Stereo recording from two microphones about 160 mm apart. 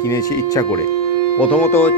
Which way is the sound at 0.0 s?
20° left (ahead or behind).